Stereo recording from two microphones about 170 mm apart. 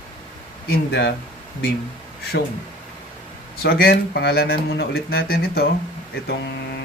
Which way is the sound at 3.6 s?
65° left (ahead or behind).